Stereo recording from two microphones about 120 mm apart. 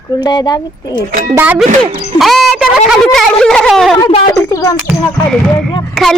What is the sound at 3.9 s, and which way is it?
Speech, 45° left (ahead or behind).